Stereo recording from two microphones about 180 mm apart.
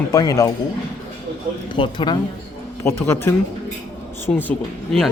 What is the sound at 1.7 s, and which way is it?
Speech, 25° left (ahead or behind).